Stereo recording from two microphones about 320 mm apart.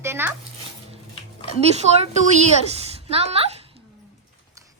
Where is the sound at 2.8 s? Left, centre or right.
Centre.